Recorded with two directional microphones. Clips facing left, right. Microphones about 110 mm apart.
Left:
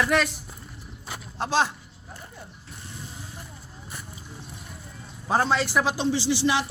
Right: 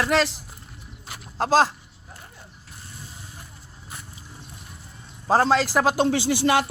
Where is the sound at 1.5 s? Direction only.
40° right (ahead or behind).